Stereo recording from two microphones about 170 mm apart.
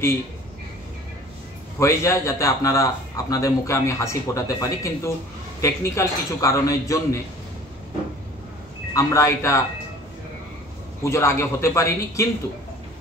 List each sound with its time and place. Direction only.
1.8 s a man's voice: 15° left (ahead or behind)
8.9 s a man's voice: 15° left (ahead or behind)
11.1 s a man's voice: 15° left (ahead or behind)